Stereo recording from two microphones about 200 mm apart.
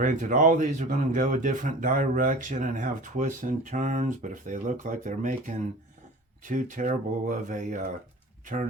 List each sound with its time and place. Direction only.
0.0 s speech: 40° right (ahead or behind)